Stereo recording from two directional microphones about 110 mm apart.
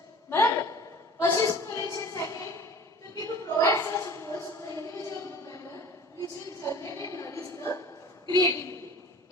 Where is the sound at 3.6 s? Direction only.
25° left (ahead or behind).